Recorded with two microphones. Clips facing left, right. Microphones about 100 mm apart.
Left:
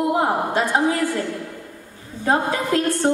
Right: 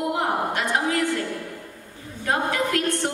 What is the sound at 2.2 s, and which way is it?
Speech, 30° left (ahead or behind).